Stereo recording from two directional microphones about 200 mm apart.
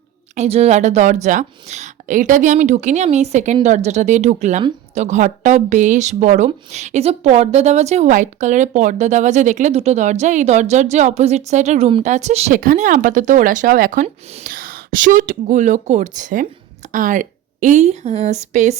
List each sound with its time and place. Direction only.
0.3 s a woman's voice: 30° right (ahead or behind)